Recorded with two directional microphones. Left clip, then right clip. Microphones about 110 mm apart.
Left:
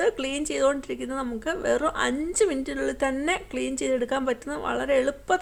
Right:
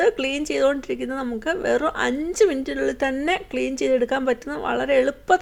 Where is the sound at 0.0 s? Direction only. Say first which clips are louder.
Right 5 dB; 30° right (ahead or behind).